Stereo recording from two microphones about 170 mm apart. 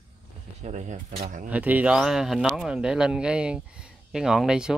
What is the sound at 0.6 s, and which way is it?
Speech, 40° right (ahead or behind).